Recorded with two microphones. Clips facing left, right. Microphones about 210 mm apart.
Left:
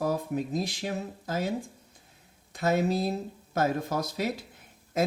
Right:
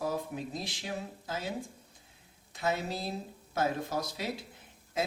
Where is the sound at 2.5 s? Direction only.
45° left (ahead or behind).